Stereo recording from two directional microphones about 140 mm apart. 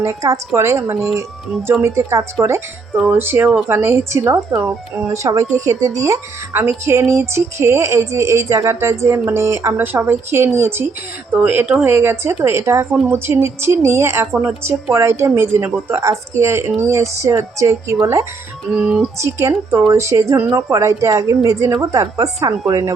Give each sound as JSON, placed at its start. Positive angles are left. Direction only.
{"t": 0.0, "sound": "speech", "side_deg": -25}
{"t": 18.7, "sound": "speech", "side_deg": -5}
{"t": 19.2, "sound": "speech", "side_deg": -20}